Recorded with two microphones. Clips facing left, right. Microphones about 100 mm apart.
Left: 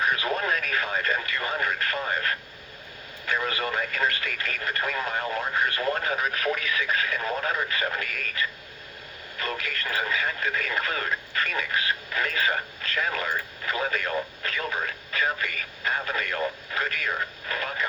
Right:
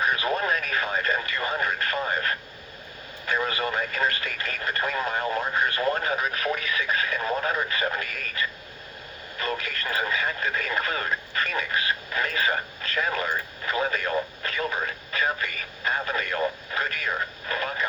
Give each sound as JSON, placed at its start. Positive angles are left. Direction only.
{"t": 0.0, "sound": "radio", "side_deg": -25}
{"t": 3.2, "sound": "speech", "side_deg": -25}